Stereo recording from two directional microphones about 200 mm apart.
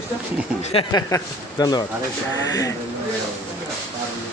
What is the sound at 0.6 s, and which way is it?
Speech, 25° left (ahead or behind).